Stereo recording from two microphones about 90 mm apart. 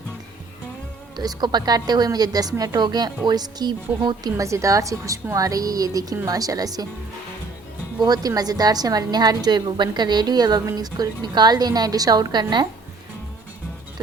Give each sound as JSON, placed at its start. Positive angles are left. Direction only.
{"t": 1.1, "sound": "a woman's voice", "side_deg": -50}
{"t": 4.4, "sound": "a woman's voice", "side_deg": -35}
{"t": 7.9, "sound": "a woman's voice", "side_deg": -45}